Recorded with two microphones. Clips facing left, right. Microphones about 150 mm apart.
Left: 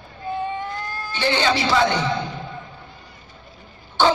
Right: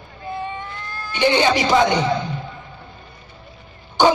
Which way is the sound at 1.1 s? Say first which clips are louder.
Right 4 dB; 15° right (ahead or behind).